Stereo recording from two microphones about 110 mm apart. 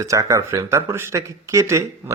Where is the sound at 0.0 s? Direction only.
30° right (ahead or behind).